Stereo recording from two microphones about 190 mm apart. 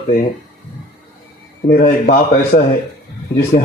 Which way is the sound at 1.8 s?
45° left (ahead or behind).